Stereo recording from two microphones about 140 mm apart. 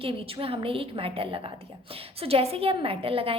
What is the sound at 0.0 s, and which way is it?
A woman's voice, 40° right (ahead or behind).